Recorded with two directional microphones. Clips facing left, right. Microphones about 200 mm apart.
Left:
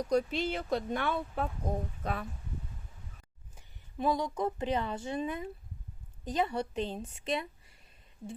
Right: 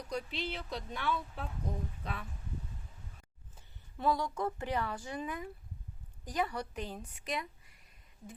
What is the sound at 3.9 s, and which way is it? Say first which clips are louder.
A woman's voice: left 2 dB; 20° left (ahead or behind).